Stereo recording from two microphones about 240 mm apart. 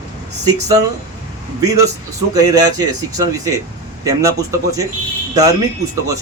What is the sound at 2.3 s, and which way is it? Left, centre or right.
A man's voice, centre.